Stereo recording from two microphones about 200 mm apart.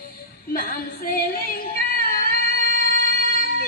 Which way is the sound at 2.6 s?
45° left (ahead or behind).